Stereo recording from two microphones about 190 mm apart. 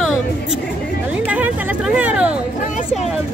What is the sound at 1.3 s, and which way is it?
Vehicle, 5° right (ahead or behind).